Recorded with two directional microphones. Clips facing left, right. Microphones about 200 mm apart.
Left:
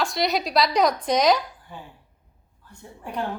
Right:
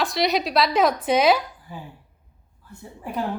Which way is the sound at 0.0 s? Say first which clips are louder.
Right 2 dB; centre (ahead or behind).